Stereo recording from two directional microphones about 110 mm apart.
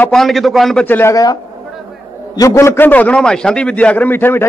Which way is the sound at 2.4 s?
30° left (ahead or behind).